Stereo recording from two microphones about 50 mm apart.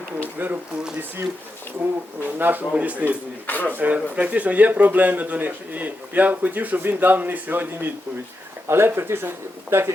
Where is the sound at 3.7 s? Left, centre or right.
Right.